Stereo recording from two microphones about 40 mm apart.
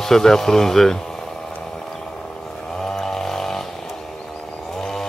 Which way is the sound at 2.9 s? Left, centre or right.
Centre.